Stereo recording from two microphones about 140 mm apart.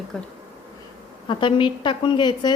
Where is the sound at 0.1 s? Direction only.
5° left (ahead or behind).